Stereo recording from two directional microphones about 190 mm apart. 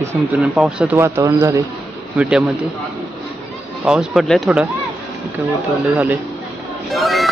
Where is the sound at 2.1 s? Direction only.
5° right (ahead or behind).